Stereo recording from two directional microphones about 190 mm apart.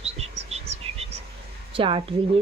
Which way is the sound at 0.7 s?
30° right (ahead or behind).